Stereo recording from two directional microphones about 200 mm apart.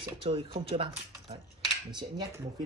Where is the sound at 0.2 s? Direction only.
25° right (ahead or behind).